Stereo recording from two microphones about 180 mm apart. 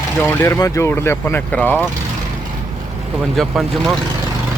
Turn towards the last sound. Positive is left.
turn(degrees=0)  # may be behind; listen again after turning